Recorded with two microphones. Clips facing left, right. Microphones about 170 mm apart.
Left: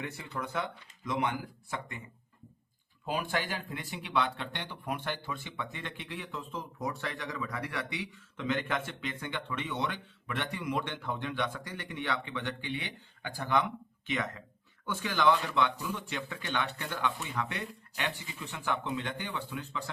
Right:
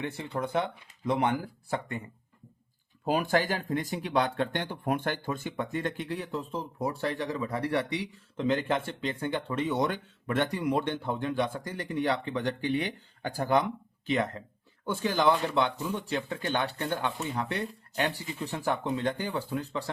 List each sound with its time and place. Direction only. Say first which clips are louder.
0.0 s speech: right 6 dB; 30° right (ahead or behind)
3.0 s speech: right 7 dB; 45° right (ahead or behind)